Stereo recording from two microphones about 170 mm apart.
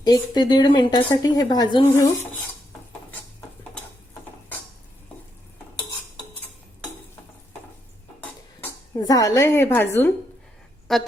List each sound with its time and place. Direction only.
0.0 s speech: 25° left (ahead or behind)
9.0 s a woman's voice: 20° left (ahead or behind)
10.9 s a woman's voice: centre (ahead or behind)